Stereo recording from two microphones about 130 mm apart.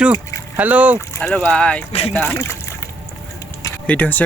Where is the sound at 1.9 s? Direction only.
55° left (ahead or behind).